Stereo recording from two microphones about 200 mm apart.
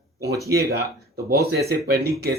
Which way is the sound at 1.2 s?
50° right (ahead or behind).